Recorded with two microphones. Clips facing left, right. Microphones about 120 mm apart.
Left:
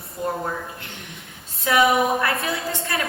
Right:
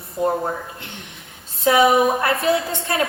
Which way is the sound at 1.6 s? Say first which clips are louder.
Right 3 dB; 25° right (ahead or behind).